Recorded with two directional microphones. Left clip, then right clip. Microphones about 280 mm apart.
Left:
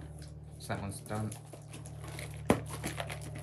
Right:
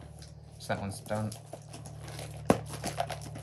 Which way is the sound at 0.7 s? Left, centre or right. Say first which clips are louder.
Right 5 dB; centre.